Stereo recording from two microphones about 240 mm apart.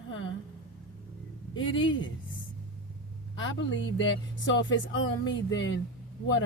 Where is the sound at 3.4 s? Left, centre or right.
Left.